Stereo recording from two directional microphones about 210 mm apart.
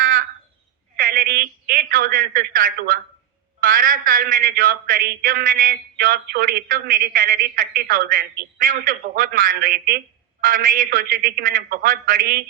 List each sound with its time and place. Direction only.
0.0 s frog: 40° right (ahead or behind)
0.9 s a woman's voice: 45° right (ahead or behind)